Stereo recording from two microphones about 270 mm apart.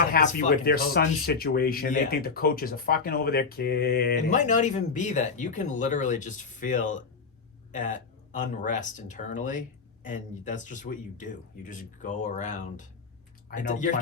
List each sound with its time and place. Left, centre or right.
0.1 s speech: left